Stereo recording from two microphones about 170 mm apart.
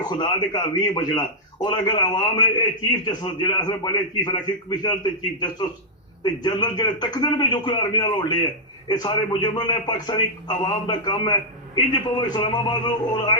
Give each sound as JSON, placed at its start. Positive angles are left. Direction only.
{"t": 0.0, "sound": "a man's voice", "side_deg": 25}
{"t": 6.2, "sound": "a man's voice", "side_deg": 25}